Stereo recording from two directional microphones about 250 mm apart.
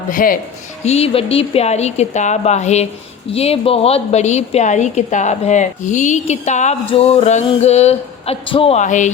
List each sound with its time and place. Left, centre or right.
0.1 s a woman's voice: left